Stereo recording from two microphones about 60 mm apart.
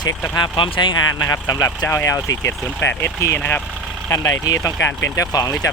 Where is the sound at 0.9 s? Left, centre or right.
Left.